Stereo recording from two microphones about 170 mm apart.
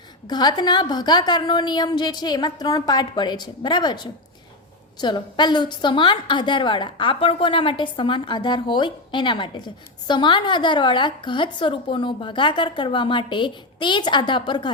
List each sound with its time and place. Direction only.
0.3 s a woman's voice: 25° left (ahead or behind)